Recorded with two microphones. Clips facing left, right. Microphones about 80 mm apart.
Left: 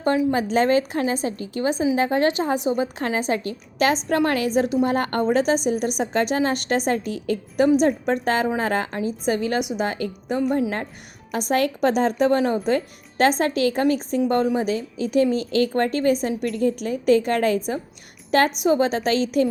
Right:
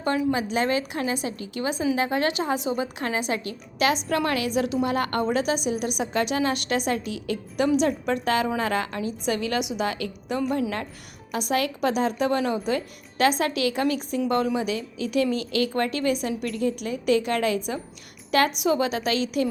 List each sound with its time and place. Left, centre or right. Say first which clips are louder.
0.5 s a woman's voice: left 6 dB; left